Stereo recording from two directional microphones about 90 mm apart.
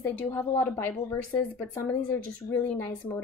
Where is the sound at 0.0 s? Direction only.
25° left (ahead or behind).